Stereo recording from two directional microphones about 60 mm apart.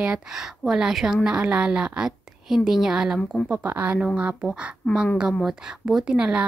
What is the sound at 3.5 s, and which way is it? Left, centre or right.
Speech, right.